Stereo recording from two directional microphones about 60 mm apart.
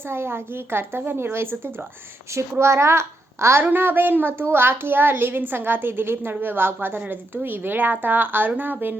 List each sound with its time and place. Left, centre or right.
0.1 s a woman's voice: right
3.6 s a woman's voice: right